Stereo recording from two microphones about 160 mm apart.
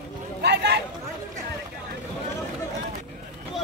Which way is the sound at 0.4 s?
90° right.